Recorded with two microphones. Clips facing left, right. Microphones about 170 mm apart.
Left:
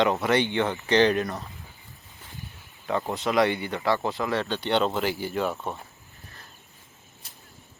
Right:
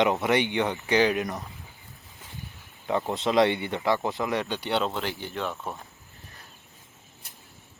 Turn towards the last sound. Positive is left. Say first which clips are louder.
# left 4 dB
turn(degrees=0)  # may be behind; listen again after turning